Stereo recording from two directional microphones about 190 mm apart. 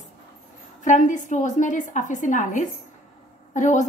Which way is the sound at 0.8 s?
40° left (ahead or behind).